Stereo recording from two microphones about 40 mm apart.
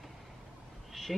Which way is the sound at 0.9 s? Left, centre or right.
Centre.